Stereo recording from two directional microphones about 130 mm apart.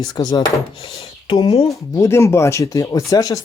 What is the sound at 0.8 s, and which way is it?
Speech, 40° left (ahead or behind).